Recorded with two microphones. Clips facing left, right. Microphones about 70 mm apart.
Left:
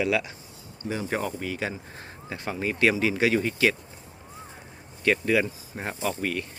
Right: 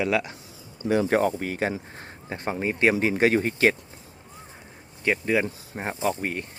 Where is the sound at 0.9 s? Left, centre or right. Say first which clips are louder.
Right 8 dB; right.